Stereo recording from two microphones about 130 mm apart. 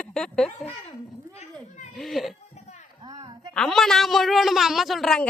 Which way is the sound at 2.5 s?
60° left (ahead or behind).